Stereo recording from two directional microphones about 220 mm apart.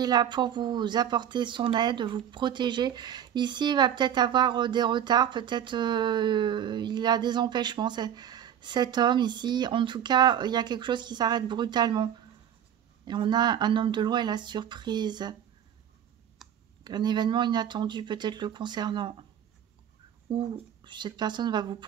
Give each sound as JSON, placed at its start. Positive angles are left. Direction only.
{"t": 0.0, "sound": "speech", "side_deg": -20}
{"t": 16.4, "sound": "a sound", "side_deg": 0}
{"t": 16.8, "sound": "speech", "side_deg": -20}
{"t": 20.2, "sound": "speech", "side_deg": -20}